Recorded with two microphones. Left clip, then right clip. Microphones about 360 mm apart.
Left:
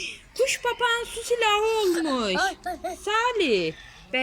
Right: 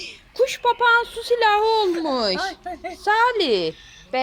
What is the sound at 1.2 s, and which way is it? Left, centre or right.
Speech, centre.